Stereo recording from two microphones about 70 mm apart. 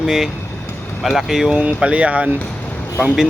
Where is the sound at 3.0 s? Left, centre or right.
Centre.